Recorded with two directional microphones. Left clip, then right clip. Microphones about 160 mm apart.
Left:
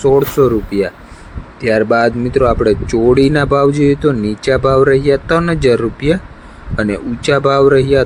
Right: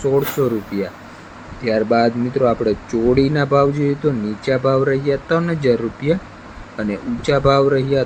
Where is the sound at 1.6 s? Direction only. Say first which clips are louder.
Left 4 dB; 60° left (ahead or behind).